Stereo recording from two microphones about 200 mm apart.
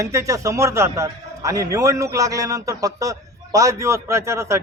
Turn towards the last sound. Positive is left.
turn(degrees=-15)  # may be behind; listen again after turning